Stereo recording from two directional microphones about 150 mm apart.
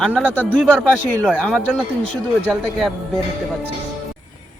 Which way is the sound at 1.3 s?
5° left (ahead or behind).